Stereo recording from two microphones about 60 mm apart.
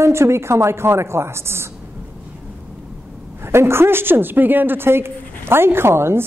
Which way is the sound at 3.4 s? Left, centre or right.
Right.